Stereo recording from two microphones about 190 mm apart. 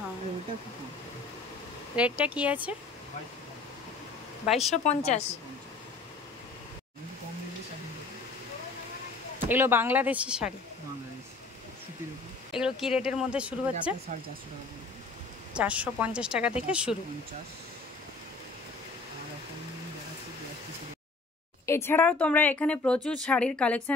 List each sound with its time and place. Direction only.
2.0 s speech: 5° right (ahead or behind)
4.5 s speech: centre (ahead or behind)
4.8 s a woman's voice: 35° left (ahead or behind)
9.5 s speech: 10° right (ahead or behind)
12.4 s speech: 5° right (ahead or behind)
15.5 s speech: 5° right (ahead or behind)
21.6 s speech: 15° left (ahead or behind)